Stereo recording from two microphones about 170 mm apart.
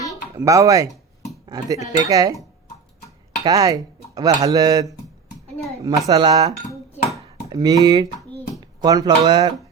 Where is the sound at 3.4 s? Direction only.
20° right (ahead or behind).